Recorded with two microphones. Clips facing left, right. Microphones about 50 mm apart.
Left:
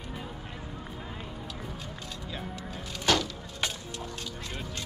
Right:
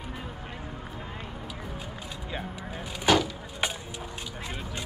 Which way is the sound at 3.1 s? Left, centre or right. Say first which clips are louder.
Right 4 dB; centre.